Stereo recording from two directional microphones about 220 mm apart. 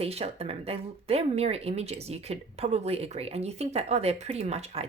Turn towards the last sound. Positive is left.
turn(degrees=-30)  # may be behind; listen again after turning